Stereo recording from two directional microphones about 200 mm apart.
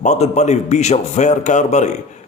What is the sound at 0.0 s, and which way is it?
Speech, 35° left (ahead or behind).